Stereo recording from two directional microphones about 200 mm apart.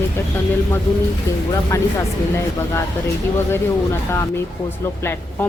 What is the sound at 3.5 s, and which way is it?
Speech, 10° left (ahead or behind).